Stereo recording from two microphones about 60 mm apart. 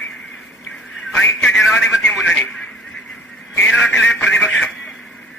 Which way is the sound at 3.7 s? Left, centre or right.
Centre.